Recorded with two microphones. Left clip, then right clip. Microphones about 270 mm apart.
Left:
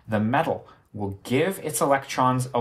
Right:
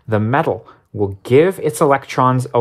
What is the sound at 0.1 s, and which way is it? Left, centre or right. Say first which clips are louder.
Speech: right 7 dB; right.